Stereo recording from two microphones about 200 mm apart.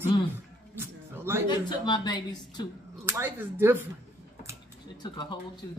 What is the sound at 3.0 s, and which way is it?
Speech, 10° right (ahead or behind).